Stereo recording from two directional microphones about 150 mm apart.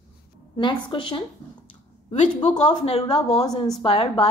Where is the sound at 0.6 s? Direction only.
30° left (ahead or behind).